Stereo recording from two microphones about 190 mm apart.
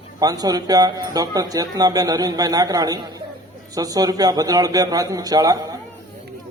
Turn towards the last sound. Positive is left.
turn(degrees=-20)  # may be behind; listen again after turning